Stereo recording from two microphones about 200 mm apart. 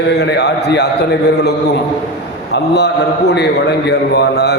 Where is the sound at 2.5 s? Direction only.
60° left (ahead or behind).